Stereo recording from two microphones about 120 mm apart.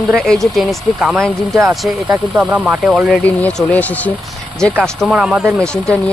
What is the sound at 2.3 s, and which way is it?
Speech, 10° right (ahead or behind).